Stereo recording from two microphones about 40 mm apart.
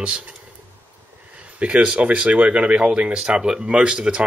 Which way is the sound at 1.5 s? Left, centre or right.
Right.